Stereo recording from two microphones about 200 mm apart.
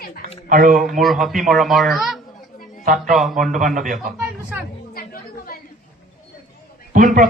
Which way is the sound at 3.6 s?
40° right (ahead or behind).